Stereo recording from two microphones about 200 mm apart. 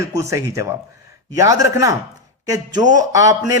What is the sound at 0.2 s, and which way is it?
A man's voice, 15° right (ahead or behind).